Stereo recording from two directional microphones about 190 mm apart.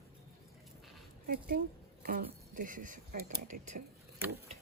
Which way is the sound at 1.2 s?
50° right (ahead or behind).